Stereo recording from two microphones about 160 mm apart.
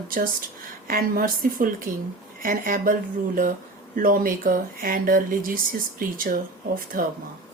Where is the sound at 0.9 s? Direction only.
65° right (ahead or behind).